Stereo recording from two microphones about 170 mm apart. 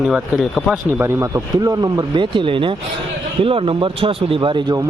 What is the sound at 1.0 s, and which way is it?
Speech, 15° right (ahead or behind).